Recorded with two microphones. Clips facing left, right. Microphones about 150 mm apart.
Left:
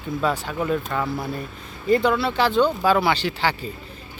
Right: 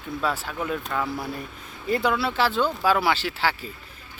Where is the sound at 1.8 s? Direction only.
5° right (ahead or behind).